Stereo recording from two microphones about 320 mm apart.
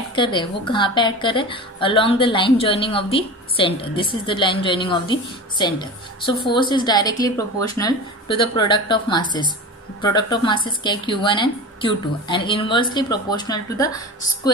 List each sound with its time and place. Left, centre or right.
0.1 s a woman's voice: centre